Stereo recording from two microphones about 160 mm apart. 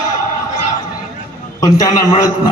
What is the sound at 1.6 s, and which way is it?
Speech, 25° left (ahead or behind).